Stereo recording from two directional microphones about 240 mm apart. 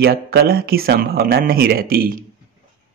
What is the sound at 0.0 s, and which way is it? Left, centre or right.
Speech, right.